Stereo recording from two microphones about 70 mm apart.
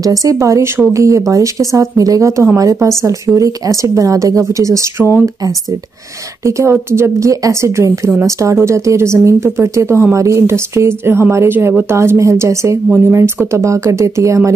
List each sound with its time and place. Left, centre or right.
0.0 s speech: right
6.4 s speech: right